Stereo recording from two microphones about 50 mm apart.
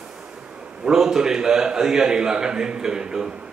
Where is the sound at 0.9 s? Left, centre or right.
Centre.